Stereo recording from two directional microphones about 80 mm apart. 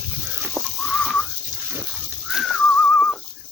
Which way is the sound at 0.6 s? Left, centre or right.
Centre.